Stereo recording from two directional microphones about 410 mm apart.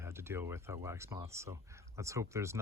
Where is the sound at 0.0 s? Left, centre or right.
Centre.